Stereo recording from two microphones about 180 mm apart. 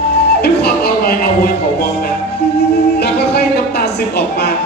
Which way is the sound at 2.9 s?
65° left (ahead or behind).